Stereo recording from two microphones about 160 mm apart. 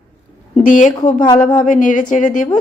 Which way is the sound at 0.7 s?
50° left (ahead or behind).